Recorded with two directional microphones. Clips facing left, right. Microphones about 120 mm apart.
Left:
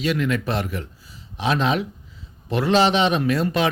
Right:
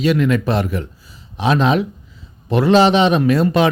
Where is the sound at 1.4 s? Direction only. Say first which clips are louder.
Right 6 dB; 40° right (ahead or behind).